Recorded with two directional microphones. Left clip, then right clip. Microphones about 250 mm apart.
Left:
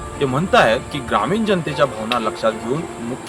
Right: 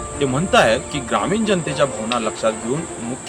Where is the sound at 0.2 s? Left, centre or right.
Centre.